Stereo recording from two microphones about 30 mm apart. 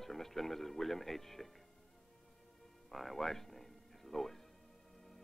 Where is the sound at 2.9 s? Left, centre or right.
Centre.